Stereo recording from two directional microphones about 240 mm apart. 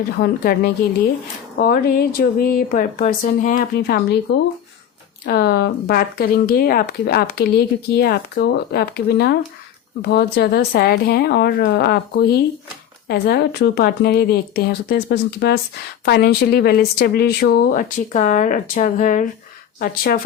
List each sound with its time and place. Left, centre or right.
0.2 s speech: left
5.2 s speech: left